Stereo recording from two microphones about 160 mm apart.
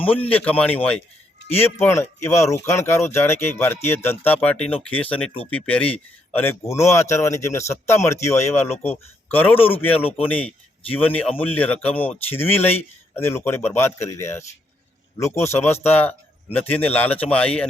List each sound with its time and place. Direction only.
0.3 s a man's voice: 10° left (ahead or behind)
8.7 s speech: 40° left (ahead or behind)
9.3 s a man's voice: 10° left (ahead or behind)